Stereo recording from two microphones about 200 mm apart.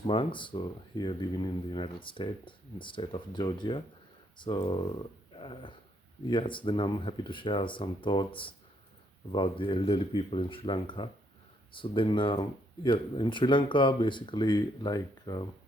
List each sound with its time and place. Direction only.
0.1 s speech: 25° left (ahead or behind)